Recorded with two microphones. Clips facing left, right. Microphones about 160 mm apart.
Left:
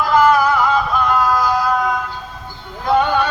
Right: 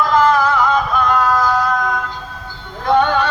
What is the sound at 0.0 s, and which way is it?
Music, 10° left (ahead or behind).